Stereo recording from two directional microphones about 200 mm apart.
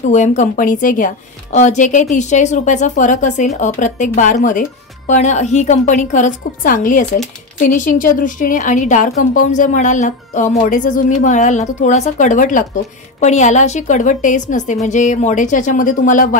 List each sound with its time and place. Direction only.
0.1 s speech: 40° left (ahead or behind)